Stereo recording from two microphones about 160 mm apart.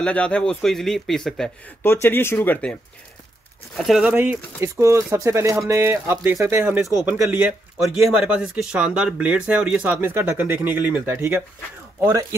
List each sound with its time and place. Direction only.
0.0 s speech: 5° left (ahead or behind)
1.8 s speech: 15° left (ahead or behind); by 12.4 s 20° right (ahead or behind)